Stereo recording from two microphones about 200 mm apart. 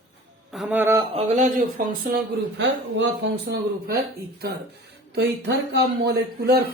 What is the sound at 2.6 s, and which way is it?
Speech, 65° right (ahead or behind).